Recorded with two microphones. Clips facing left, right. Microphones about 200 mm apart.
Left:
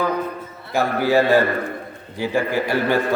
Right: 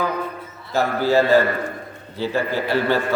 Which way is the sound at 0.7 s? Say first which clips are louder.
Even; 15° left (ahead or behind).